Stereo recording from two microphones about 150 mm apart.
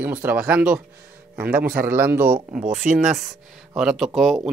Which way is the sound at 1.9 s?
15° right (ahead or behind).